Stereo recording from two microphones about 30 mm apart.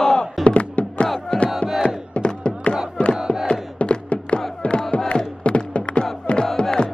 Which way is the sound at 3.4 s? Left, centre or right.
Left.